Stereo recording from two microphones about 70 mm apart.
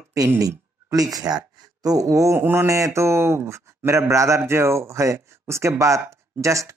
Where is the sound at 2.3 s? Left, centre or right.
Right.